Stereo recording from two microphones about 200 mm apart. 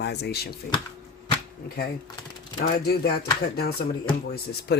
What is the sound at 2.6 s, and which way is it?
Speech, 50° left (ahead or behind).